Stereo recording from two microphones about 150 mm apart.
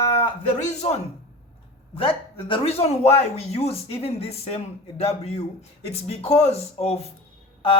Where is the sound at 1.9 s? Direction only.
35° left (ahead or behind).